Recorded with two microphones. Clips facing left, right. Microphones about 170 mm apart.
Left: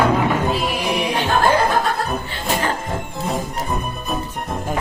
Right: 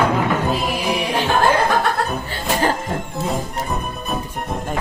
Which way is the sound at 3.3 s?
Centre (ahead or behind).